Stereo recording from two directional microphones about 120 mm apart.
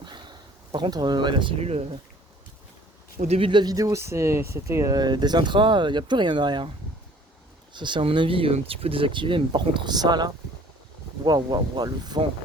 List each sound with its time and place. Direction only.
0.0 s a sound: 40° right (ahead or behind)
1.5 s speech: 60° right (ahead or behind)
3.2 s speech: 60° right (ahead or behind)
3.5 s speech: 35° right (ahead or behind)
7.7 s speech: 40° right (ahead or behind)